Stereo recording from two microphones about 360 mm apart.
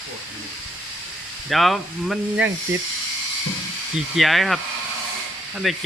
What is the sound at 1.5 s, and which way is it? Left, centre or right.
A man's voice, centre.